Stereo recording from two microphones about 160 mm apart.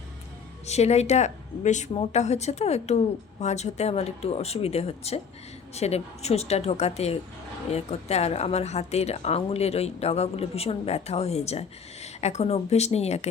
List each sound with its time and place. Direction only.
0.6 s a woman's voice: 45° left (ahead or behind)